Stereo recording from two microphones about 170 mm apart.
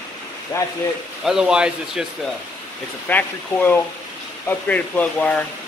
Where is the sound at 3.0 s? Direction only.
10° left (ahead or behind).